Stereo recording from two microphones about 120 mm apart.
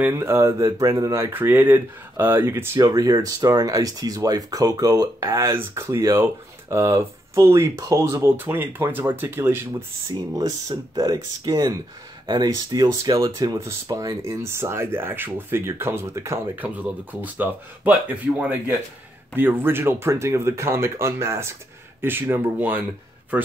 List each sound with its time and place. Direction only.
0.0 s speech: 20° right (ahead or behind)
2.8 s speech: 30° right (ahead or behind)
10.1 s speech: 30° right (ahead or behind)
16.5 s speech: 15° right (ahead or behind)